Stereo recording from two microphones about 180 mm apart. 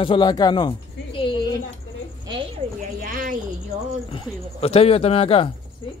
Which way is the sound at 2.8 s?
50° right (ahead or behind).